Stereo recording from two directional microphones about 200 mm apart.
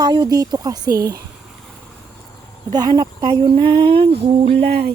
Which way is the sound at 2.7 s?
20° right (ahead or behind).